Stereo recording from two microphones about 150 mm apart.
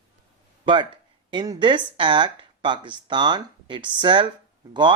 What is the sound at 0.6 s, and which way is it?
Speech, 30° right (ahead or behind).